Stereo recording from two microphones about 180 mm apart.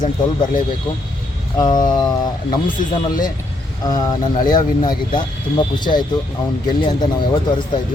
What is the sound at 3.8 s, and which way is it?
Speech, 20° left (ahead or behind).